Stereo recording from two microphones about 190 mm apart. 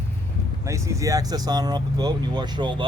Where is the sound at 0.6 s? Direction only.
15° right (ahead or behind).